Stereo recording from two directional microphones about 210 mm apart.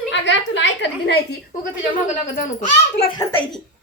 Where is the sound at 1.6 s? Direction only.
40° left (ahead or behind).